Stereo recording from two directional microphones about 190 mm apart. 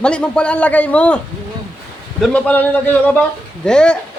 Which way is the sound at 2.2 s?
5° left (ahead or behind).